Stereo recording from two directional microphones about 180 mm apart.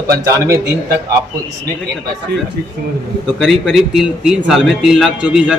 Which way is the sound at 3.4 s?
Centre (ahead or behind).